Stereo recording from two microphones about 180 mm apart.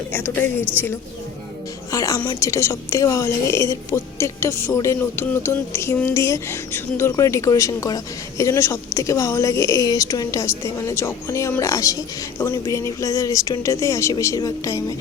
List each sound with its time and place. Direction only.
0.1 s a woman's voice: 10° left (ahead or behind)
1.9 s a woman's voice: 20° left (ahead or behind)